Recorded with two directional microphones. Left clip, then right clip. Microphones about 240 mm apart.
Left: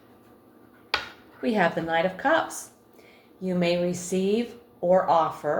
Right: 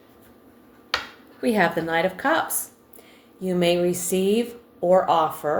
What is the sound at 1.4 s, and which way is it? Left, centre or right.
Speech, right.